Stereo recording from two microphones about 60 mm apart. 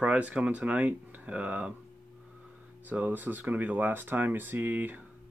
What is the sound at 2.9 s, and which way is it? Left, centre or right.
Speech, right.